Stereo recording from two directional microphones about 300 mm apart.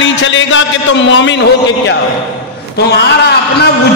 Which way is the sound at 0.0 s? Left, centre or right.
Left.